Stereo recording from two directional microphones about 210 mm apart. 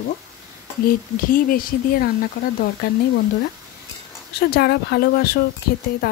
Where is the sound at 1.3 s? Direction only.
45° left (ahead or behind).